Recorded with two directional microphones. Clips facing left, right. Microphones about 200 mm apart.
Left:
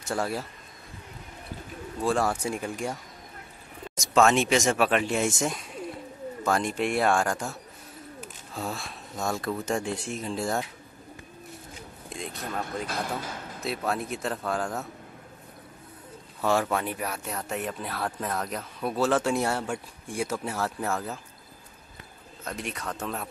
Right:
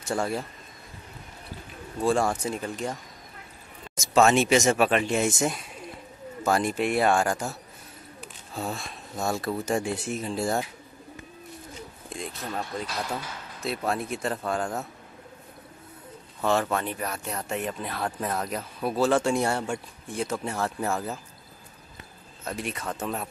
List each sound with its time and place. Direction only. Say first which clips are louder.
0.0 s speech: right 1 dB; centre (ahead or behind)
2.0 s speech: right 2 dB; centre (ahead or behind)
3.9 s speech: right 1 dB; 5° right (ahead or behind)
8.5 s speech: right 1 dB; centre (ahead or behind)
12.1 s a sound: even; centre (ahead or behind)
12.8 s speech: left 1 dB; 50° left (ahead or behind)
13.6 s speech: right 1 dB; centre (ahead or behind)
16.7 s speech: even; 10° left (ahead or behind)
22.4 s speech: right 2 dB; 5° right (ahead or behind)